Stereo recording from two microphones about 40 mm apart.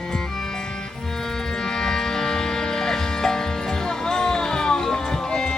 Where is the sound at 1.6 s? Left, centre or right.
Centre.